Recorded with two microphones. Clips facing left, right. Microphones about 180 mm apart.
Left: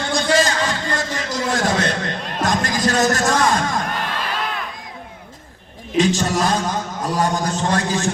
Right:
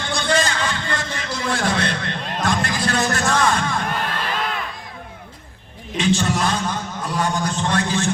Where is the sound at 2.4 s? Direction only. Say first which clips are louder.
Left 3 dB; 40° left (ahead or behind).